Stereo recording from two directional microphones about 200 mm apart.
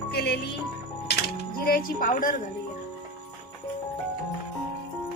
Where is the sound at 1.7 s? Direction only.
45° left (ahead or behind).